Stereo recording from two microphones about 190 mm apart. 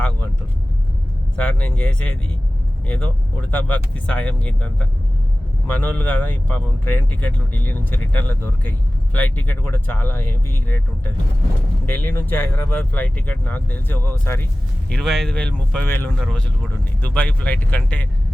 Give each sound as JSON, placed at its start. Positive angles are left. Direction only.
{"t": 1.4, "sound": "speech", "side_deg": 5}
{"t": 11.9, "sound": "speech", "side_deg": 10}